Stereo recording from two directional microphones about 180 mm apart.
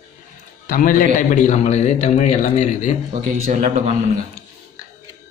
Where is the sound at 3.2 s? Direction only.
45° right (ahead or behind).